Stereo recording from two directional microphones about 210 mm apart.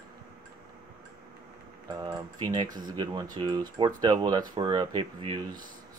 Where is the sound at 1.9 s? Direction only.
20° right (ahead or behind).